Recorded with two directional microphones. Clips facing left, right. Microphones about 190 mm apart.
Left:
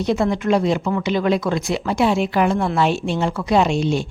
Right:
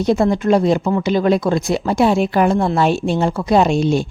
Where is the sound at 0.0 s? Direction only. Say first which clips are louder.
Right 4 dB; 40° right (ahead or behind).